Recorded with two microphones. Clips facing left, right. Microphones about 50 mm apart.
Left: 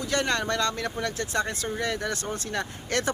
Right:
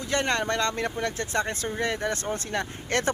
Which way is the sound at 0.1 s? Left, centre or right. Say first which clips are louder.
Right 1 dB; right.